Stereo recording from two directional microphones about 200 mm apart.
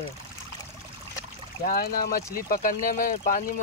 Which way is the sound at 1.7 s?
45° left (ahead or behind).